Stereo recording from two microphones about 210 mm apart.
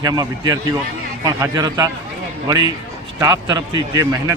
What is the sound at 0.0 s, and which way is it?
A man's voice, 20° right (ahead or behind).